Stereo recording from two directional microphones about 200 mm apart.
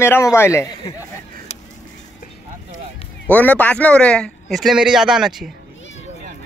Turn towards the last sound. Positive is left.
turn(degrees=0)  # may be behind; listen again after turning